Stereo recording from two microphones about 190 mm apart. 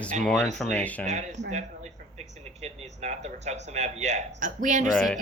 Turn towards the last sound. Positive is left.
turn(degrees=5)  # may be behind; listen again after turning